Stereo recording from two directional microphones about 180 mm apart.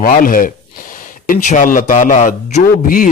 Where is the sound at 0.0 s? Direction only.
50° left (ahead or behind).